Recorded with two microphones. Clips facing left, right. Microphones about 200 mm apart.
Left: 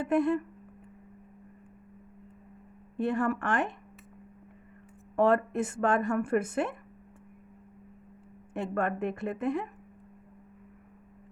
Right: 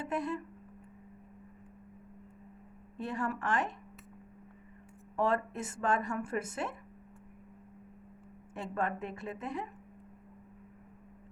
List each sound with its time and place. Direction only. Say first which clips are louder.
0.0 s a woman's voice: left 9 dB; 55° left (ahead or behind)
3.0 s a woman's voice: left 7 dB; 55° left (ahead or behind)
5.1 s a woman's voice: left 7 dB; 55° left (ahead or behind)
8.5 s a woman's voice: left 5 dB; 55° left (ahead or behind)